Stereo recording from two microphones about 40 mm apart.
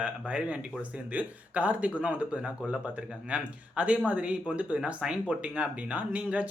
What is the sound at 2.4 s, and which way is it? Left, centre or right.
Speech, centre.